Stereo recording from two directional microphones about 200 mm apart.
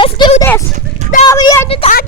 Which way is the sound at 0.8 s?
35° right (ahead or behind).